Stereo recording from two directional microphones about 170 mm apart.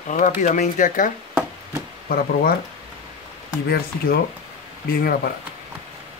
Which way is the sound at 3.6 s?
65° left (ahead or behind).